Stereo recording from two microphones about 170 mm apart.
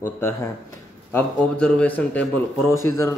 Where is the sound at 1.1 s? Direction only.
5° left (ahead or behind).